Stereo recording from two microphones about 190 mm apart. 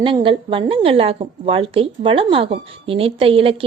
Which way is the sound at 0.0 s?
25° right (ahead or behind).